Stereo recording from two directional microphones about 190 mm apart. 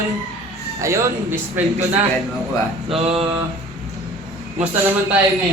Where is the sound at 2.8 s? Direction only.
30° right (ahead or behind).